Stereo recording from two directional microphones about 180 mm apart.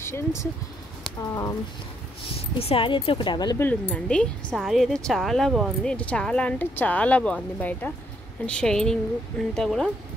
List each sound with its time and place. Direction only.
0.0 s speech: 15° left (ahead or behind)
2.3 s speech: 30° left (ahead or behind)
3.6 s speech: 10° left (ahead or behind)